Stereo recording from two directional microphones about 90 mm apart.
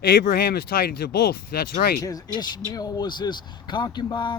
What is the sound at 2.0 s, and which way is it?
Speech, 45° left (ahead or behind).